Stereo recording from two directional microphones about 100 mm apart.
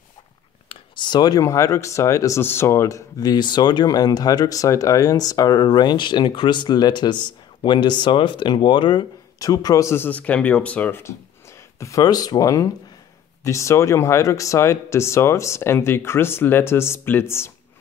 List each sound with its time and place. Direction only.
0.7 s a sound: 50° left (ahead or behind)
1.4 s speech: 30° left (ahead or behind); by 9.0 s 50° left (ahead or behind)
9.4 s speech: 35° left (ahead or behind)
10.0 s speech: 15° left (ahead or behind)
11.8 s speech: 35° left (ahead or behind)